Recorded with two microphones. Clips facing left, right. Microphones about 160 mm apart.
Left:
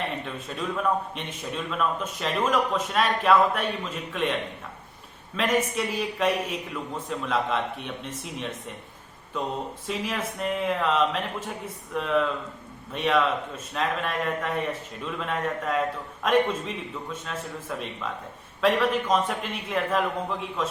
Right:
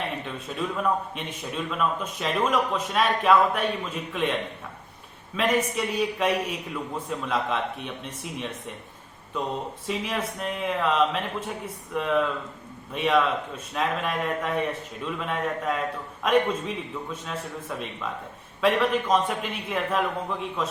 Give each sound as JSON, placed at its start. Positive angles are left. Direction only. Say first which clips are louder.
{"t": 0.3, "sound": "speech", "louder": "right 1 dB", "side_deg": 0}
{"t": 5.4, "sound": "speech", "louder": "right 1 dB", "side_deg": 0}